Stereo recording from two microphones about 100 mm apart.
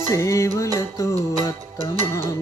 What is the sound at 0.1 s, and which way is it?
Music, 30° left (ahead or behind).